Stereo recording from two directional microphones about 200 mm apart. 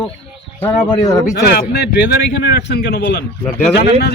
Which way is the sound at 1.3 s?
55° left (ahead or behind).